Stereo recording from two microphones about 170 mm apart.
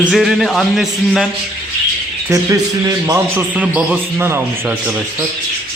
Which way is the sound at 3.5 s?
10° right (ahead or behind).